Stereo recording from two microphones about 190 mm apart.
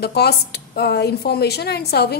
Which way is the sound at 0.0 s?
60° left (ahead or behind).